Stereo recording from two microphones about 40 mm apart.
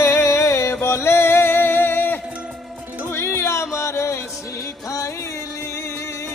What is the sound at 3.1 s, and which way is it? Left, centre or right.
Music, left.